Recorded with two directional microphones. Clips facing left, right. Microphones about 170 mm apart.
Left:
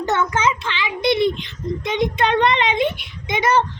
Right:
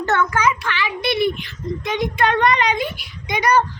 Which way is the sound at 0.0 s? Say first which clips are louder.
Right 1 dB; 20° left (ahead or behind).